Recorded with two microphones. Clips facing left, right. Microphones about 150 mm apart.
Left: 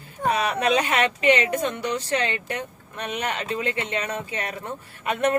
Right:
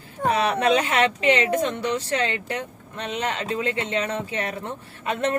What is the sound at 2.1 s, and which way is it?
A woman's voice, 20° left (ahead or behind).